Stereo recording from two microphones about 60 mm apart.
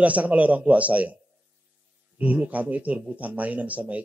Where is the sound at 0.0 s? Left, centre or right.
Right.